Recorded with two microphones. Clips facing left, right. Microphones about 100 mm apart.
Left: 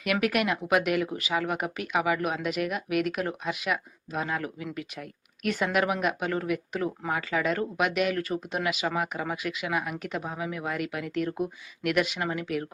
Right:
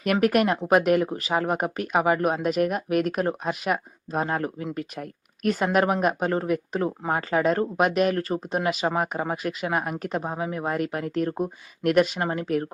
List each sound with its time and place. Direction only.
0.0 s speech: 40° right (ahead or behind)